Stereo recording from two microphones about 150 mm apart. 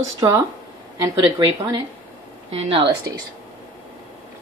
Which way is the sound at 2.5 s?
35° right (ahead or behind).